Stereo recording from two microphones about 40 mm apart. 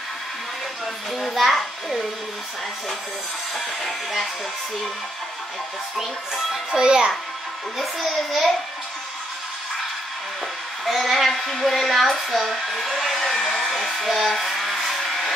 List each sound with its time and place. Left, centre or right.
1.1 s a child's voice: centre
3.5 s a child's voice: centre
6.7 s a child's voice: right
8.3 s a child's voice: centre
10.9 s a child's voice: centre
15.0 s vehicle: centre